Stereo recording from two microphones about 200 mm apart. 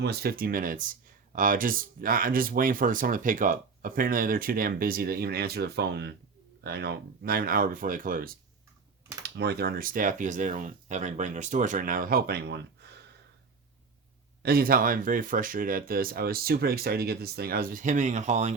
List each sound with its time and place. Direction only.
0.0 s speech: 55° right (ahead or behind)
9.2 s speech: 55° right (ahead or behind)
14.4 s speech: 50° right (ahead or behind)